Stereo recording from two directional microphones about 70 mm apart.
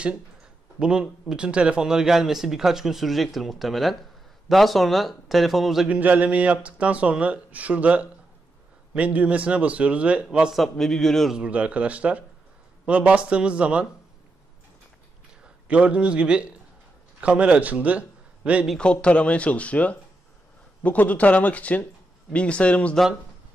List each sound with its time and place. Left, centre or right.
0.7 s a man's voice: centre
5.9 s speech: right
10.5 s speech: centre
11.3 s speech: centre
15.4 s a man's voice: centre
18.8 s speech: centre